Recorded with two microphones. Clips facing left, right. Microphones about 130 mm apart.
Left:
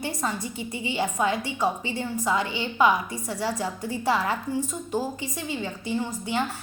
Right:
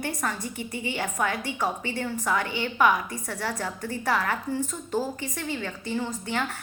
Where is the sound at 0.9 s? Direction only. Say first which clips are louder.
Left 4 dB; 20° left (ahead or behind).